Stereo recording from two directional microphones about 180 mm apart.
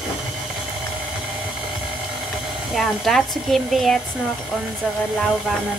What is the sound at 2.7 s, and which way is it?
Speech, centre (ahead or behind).